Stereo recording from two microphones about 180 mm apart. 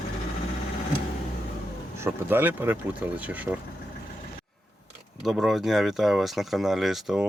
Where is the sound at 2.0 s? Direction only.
10° right (ahead or behind).